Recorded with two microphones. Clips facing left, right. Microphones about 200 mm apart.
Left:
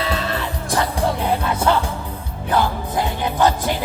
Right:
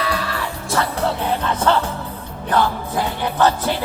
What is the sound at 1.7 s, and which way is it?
Music, 15° left (ahead or behind).